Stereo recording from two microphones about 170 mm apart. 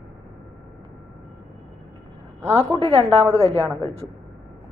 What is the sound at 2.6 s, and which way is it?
Speech, 30° right (ahead or behind).